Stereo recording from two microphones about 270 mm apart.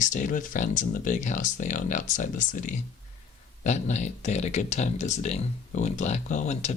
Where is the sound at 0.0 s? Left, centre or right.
Left.